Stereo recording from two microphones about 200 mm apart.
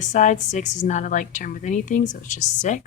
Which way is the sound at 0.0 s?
40° left (ahead or behind).